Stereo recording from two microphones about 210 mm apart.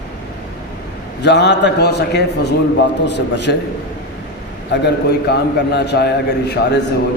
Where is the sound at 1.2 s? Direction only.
55° left (ahead or behind).